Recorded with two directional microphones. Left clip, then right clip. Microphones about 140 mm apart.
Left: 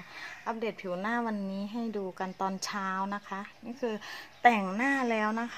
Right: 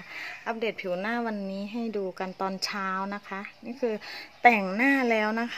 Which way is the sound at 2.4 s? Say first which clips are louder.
Right 3 dB; 25° right (ahead or behind).